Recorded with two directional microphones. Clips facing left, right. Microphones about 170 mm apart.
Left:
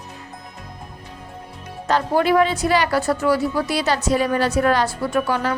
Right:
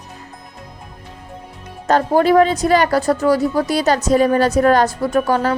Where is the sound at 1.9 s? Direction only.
40° right (ahead or behind).